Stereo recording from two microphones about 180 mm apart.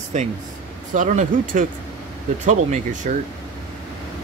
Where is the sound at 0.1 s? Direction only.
40° right (ahead or behind).